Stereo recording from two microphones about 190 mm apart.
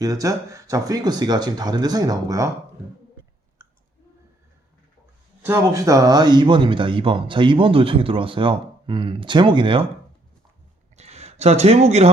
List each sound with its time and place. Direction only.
0.0 s speech: 20° right (ahead or behind)
5.4 s speech: 15° right (ahead or behind)
10.9 s a sound: 35° right (ahead or behind)